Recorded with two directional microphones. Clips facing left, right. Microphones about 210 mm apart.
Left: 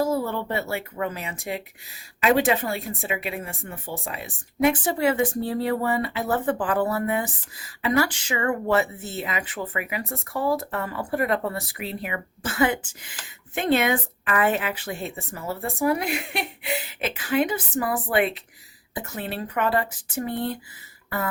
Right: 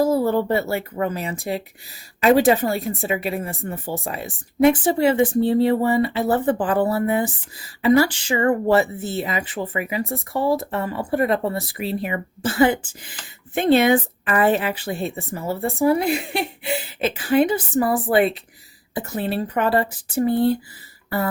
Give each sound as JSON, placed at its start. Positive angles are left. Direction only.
{"t": 0.0, "sound": "speech", "side_deg": -40}